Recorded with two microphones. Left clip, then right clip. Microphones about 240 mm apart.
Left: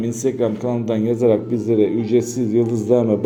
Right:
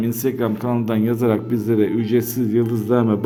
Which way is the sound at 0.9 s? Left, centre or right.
Right.